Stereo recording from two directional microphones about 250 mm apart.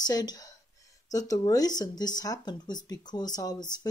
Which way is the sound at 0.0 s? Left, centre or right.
Centre.